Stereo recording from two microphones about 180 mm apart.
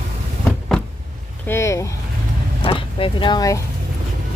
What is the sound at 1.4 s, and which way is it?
Speech, 15° left (ahead or behind).